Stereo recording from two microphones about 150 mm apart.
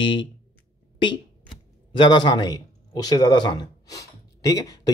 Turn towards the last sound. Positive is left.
turn(degrees=20)  # may be behind; listen again after turning